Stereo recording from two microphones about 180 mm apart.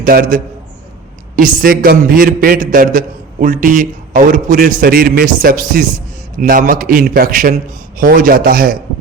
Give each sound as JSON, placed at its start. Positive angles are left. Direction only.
{"t": 0.0, "sound": "a man's voice", "side_deg": -55}